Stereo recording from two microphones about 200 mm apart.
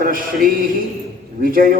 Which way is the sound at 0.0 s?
45° right (ahead or behind).